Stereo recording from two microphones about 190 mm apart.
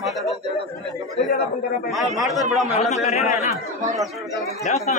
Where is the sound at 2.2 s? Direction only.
Centre (ahead or behind).